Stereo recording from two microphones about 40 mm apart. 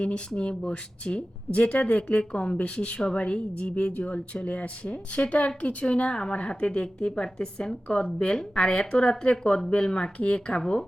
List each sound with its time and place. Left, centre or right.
0.0 s speech: left